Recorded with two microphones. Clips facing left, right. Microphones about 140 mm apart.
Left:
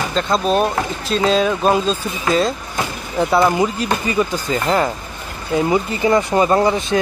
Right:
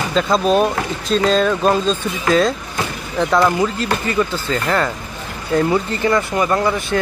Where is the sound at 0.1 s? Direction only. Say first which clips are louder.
Right 3 dB; centre (ahead or behind).